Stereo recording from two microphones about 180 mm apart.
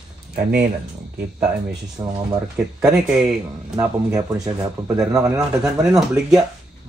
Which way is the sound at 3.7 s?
20° right (ahead or behind).